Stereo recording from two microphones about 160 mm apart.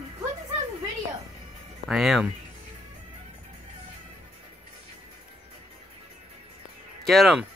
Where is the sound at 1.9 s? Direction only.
Centre (ahead or behind).